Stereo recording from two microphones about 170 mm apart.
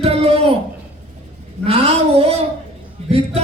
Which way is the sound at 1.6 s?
35° right (ahead or behind).